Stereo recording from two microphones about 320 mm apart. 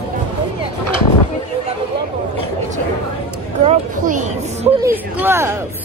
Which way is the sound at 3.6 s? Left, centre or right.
Right.